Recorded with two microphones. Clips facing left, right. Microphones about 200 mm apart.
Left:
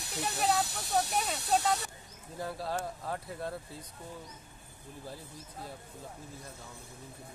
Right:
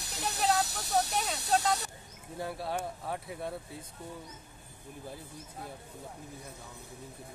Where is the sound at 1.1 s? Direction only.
Centre (ahead or behind).